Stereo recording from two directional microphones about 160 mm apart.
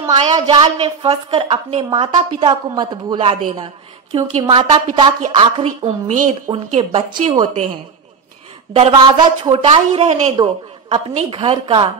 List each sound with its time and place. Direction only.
0.0 s a woman's voice: 25° right (ahead or behind)
0.7 s a woman's voice: 40° right (ahead or behind)
6.5 s a woman's voice: 35° right (ahead or behind)
8.7 s a woman's voice: 30° right (ahead or behind)